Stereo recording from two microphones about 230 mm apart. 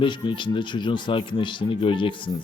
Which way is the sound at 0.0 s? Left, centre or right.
Left.